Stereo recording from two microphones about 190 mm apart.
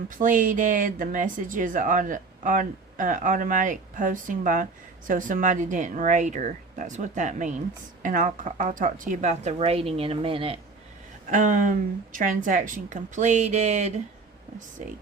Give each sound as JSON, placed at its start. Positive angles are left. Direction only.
{"t": 0.1, "sound": "speech", "side_deg": -45}
{"t": 11.3, "sound": "speech", "side_deg": -45}